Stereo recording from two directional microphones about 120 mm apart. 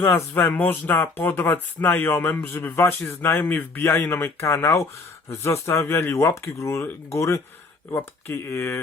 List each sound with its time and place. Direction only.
0.0 s speech: 15° left (ahead or behind)